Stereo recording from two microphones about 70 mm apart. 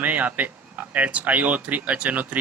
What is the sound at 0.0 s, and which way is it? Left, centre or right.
Speech, right.